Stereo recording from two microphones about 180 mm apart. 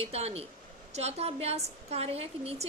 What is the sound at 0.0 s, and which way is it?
Speech, 35° right (ahead or behind).